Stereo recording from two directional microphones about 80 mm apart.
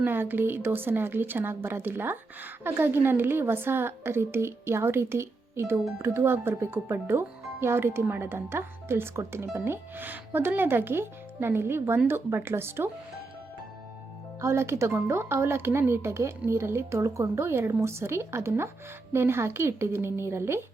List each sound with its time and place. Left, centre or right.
0.0 s speech: right
14.4 s speech: right